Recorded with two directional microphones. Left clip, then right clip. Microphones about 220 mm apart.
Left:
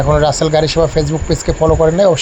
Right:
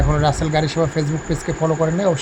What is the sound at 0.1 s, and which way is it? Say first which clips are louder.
Speech: left 8 dB; 10° left (ahead or behind).